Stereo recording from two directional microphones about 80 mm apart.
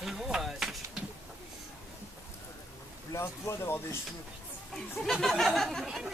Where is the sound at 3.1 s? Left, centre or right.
Left.